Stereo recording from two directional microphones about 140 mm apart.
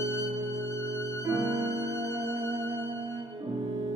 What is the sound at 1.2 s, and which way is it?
Music, 20° right (ahead or behind).